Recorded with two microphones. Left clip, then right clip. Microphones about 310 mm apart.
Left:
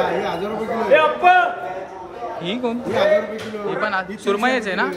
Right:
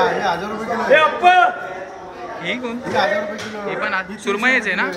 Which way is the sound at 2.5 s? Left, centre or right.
Centre.